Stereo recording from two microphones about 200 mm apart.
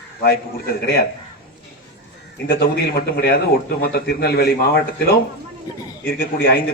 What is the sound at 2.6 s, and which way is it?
Speech, 50° left (ahead or behind).